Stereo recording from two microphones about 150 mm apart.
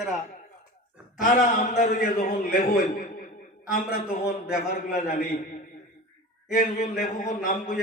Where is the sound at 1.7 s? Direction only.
50° left (ahead or behind).